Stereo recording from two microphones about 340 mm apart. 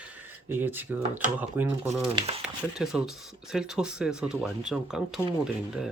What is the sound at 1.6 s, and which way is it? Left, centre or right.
Speech, centre.